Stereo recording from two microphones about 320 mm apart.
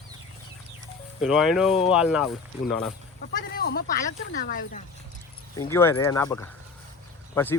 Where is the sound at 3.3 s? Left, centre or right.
Left.